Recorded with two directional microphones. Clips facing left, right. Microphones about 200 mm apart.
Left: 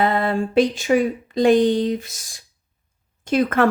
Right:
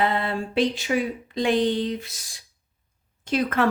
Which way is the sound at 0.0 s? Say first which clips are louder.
Left 5 dB; 45° left (ahead or behind).